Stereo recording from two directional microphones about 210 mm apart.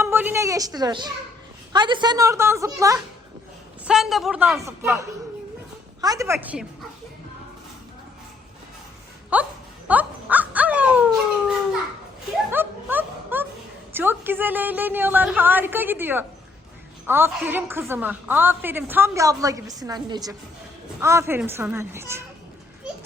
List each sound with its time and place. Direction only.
0.0 s a woman's voice: 10° right (ahead or behind)
3.8 s speech: centre (ahead or behind)
4.6 s a woman's voice: 15° right (ahead or behind)
9.3 s wail: 5° right (ahead or behind)
12.5 s music: 10° right (ahead or behind)
13.9 s a woman's voice: 10° right (ahead or behind)